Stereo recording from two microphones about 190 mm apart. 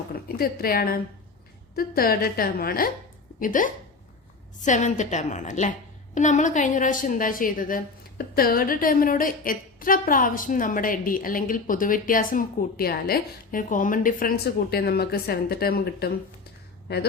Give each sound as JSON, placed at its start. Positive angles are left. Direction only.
{"t": 0.3, "sound": "a woman's voice", "side_deg": 50}